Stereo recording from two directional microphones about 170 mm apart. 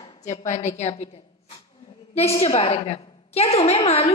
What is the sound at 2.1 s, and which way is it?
A woman's voice, 35° left (ahead or behind).